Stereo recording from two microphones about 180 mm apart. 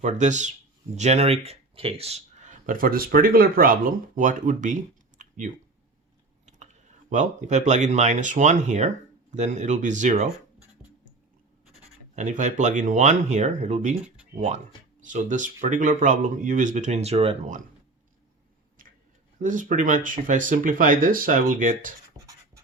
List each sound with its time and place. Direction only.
0.0 s speech: 40° right (ahead or behind)
7.1 s speech: 40° right (ahead or behind)
11.8 s speech: 40° right (ahead or behind)
19.4 s speech: 45° right (ahead or behind)
22.2 s a sound: 20° right (ahead or behind)